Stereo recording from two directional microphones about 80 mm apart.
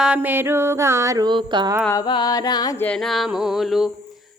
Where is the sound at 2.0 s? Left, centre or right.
Left.